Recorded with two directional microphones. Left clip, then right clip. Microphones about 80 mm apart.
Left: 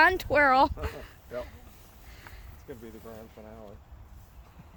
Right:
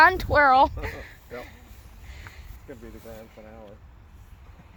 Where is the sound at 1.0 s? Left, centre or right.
Centre.